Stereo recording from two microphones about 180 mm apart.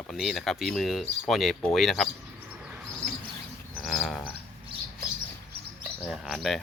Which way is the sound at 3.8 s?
Centre (ahead or behind).